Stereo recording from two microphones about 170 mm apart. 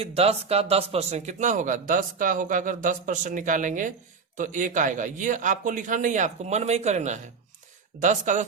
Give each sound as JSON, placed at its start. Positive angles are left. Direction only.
{"t": 0.0, "sound": "speech", "side_deg": -35}